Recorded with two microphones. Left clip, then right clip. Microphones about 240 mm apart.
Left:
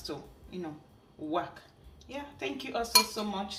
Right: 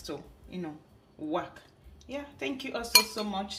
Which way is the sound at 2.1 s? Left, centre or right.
Right.